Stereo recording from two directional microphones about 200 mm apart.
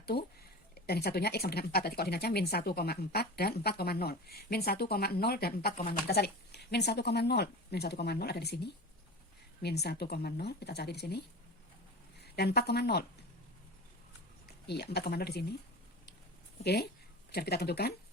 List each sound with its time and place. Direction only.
0.0 s speech: 50° left (ahead or behind)
12.2 s a woman's voice: 55° left (ahead or behind)
14.4 s speech: 55° left (ahead or behind)
16.6 s speech: 50° left (ahead or behind)